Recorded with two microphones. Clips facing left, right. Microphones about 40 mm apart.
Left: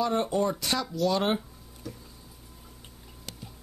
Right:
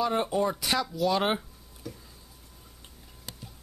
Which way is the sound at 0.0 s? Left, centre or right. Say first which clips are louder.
Even; centre.